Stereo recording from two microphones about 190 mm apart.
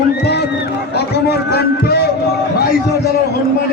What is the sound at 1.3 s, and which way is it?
Speech, 60° left (ahead or behind).